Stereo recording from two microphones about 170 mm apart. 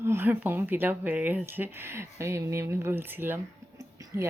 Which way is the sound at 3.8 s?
20° right (ahead or behind).